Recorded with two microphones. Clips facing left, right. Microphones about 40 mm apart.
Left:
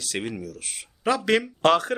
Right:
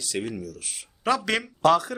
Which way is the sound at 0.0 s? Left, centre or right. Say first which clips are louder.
Even; left.